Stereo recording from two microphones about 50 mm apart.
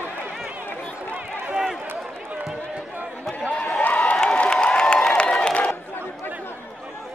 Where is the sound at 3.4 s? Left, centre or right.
Centre.